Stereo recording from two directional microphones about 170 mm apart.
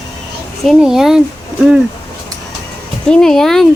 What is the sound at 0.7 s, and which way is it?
Speech, 5° right (ahead or behind).